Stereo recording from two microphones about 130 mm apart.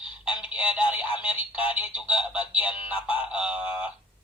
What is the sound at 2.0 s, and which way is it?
Speech, 40° left (ahead or behind).